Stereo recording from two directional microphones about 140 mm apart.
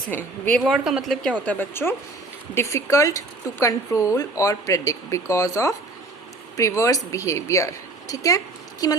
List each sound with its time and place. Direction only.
0.1 s a woman's voice: 10° left (ahead or behind)
0.6 s a woman's voice: 5° right (ahead or behind); by 8.4 s 25° left (ahead or behind)